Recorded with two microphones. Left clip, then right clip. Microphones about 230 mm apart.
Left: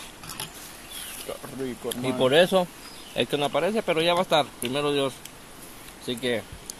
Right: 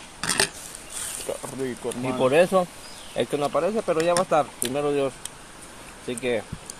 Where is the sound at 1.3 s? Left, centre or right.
Centre.